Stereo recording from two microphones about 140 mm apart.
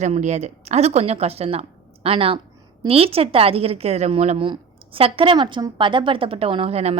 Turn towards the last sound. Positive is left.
turn(degrees=-45)  # may be behind; listen again after turning